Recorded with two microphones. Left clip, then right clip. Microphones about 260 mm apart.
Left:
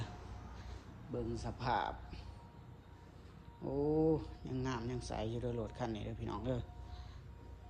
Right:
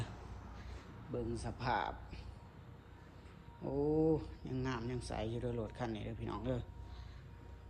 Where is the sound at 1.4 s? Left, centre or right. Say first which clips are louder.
Left 1 dB; centre.